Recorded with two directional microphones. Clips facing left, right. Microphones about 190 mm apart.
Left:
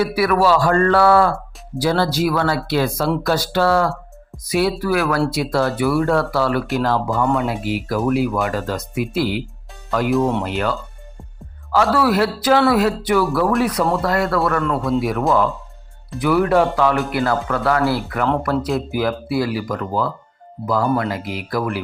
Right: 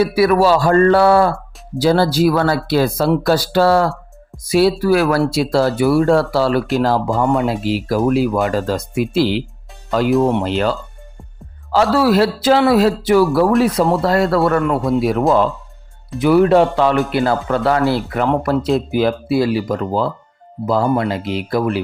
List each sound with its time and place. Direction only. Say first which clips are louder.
0.0 s speech: right 4 dB; 25° right (ahead or behind)
10.2 s speech: right 3 dB; 15° right (ahead or behind)
10.4 s speech: right 4 dB; 30° right (ahead or behind)
14.6 s speech: right 3 dB; 20° right (ahead or behind)
16.1 s speech: right 4 dB; 25° right (ahead or behind)